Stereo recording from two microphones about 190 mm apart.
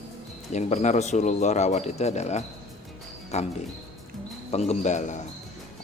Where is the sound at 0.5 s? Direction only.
35° left (ahead or behind).